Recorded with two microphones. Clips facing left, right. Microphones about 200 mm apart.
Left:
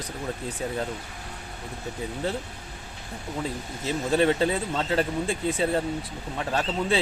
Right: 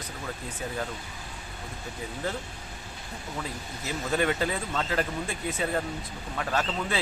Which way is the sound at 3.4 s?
30° left (ahead or behind).